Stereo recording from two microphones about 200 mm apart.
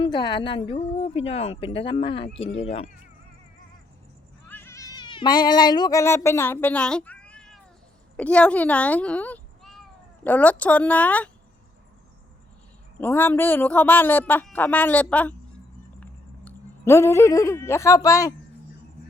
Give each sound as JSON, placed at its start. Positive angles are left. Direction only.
{"t": 0.0, "sound": "a woman's voice", "side_deg": 20}
{"t": 4.4, "sound": "a woman's voice", "side_deg": 10}
{"t": 13.0, "sound": "a woman's voice", "side_deg": 10}